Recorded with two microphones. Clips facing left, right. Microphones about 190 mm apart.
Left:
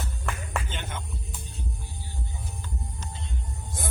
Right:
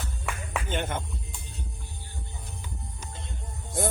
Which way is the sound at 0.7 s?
55° right (ahead or behind).